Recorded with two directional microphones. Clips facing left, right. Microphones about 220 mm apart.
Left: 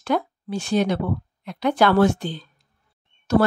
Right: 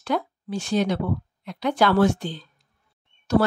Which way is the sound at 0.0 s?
55° left (ahead or behind).